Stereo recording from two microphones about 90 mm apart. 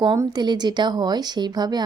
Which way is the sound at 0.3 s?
50° right (ahead or behind).